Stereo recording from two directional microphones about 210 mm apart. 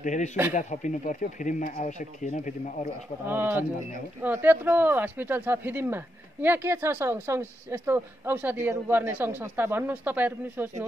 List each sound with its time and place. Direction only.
0.0 s speech: 35° left (ahead or behind)
3.3 s speech: 10° right (ahead or behind)